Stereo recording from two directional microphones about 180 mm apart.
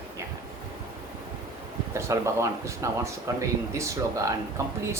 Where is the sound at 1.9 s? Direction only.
15° right (ahead or behind).